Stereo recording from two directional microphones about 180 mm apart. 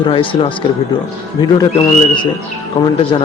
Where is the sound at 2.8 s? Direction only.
30° left (ahead or behind).